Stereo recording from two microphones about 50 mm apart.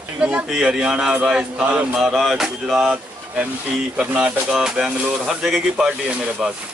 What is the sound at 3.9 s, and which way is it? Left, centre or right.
Speech, right.